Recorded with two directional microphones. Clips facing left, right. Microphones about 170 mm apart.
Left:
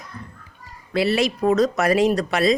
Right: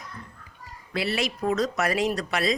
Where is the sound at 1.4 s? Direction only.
45° left (ahead or behind).